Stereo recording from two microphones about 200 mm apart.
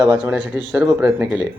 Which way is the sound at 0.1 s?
10° right (ahead or behind).